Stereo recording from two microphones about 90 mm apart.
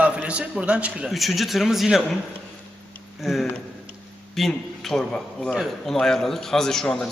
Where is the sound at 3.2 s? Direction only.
Centre (ahead or behind).